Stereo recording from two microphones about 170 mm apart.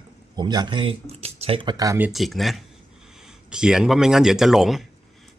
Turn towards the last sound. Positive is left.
turn(degrees=0)  # may be behind; listen again after turning